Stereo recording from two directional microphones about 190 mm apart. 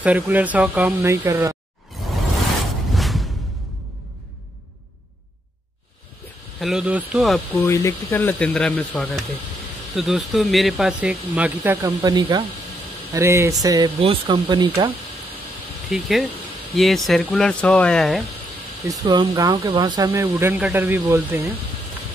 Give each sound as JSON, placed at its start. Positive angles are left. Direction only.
{"t": 0.0, "sound": "speech", "side_deg": -10}
{"t": 2.9, "sound": "music", "side_deg": 0}
{"t": 6.6, "sound": "speech", "side_deg": -5}
{"t": 7.5, "sound": "speech", "side_deg": 15}
{"t": 15.9, "sound": "speech", "side_deg": 0}
{"t": 18.9, "sound": "speech", "side_deg": -20}